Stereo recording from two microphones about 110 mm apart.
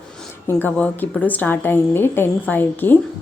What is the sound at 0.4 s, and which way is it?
A woman's voice, 15° left (ahead or behind).